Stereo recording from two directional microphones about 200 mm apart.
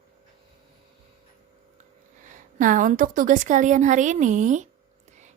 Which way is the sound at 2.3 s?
40° right (ahead or behind).